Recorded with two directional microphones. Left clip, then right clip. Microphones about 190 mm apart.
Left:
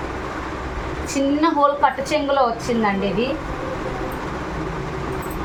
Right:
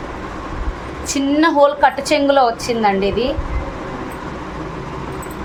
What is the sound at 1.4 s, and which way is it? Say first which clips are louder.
A woman's voice: right 5 dB; 60° right (ahead or behind).